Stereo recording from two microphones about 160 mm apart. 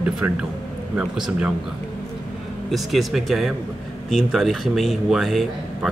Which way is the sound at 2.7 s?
Centre (ahead or behind).